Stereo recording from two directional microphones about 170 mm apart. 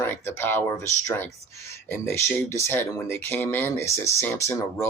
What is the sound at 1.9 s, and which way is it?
Speech, 15° left (ahead or behind).